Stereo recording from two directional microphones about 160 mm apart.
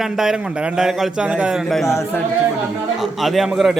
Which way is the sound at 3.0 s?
Centre (ahead or behind).